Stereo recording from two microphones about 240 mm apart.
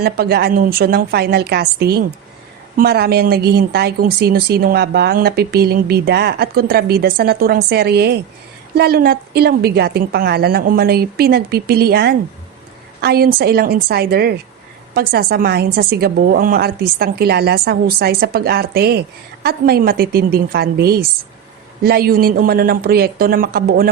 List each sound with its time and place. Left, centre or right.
0.0 s a woman's voice: right